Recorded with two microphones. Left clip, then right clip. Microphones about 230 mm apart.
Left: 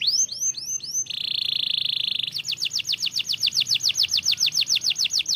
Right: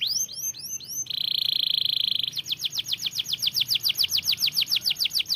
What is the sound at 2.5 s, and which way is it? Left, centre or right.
Chirp, centre.